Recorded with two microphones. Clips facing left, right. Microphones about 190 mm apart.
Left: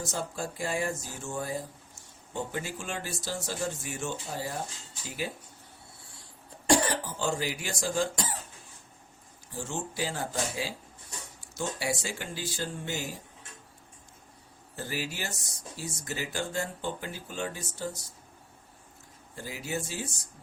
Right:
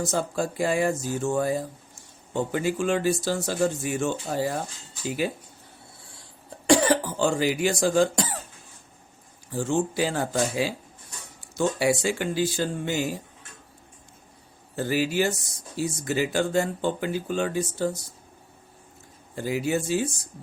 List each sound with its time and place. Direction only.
0.0 s speech: 70° right (ahead or behind); by 4.5 s 90° right
5.0 s speech: 75° right (ahead or behind)
6.7 s speech: 80° right
9.6 s speech: 80° right
14.8 s speech: 80° right
19.4 s speech: 75° right (ahead or behind)